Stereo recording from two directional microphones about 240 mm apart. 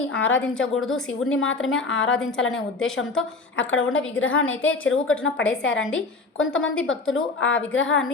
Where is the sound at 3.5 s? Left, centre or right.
Left.